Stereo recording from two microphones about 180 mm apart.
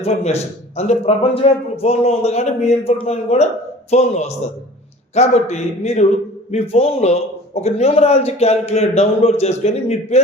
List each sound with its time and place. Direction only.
0.0 s a man's voice: 35° left (ahead or behind)